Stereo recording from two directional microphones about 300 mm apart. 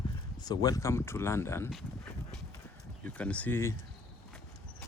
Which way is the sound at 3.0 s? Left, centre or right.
Centre.